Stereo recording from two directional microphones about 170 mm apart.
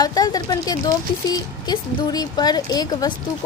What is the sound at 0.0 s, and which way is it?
A woman's voice, 25° left (ahead or behind).